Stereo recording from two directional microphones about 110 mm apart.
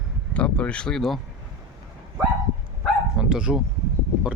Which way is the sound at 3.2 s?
5° right (ahead or behind).